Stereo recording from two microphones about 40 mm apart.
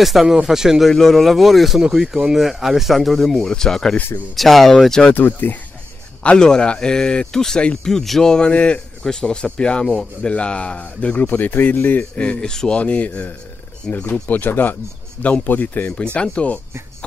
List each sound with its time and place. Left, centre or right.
0.0 s speech: centre
0.8 s speech: centre
5.1 s speech: left
6.3 s speech: centre
8.5 s speech: left
9.0 s speech: centre
11.1 s speech: left
12.2 s speech: left
12.7 s speech: left
13.9 s speech: left
14.3 s speech: left
15.9 s speech: left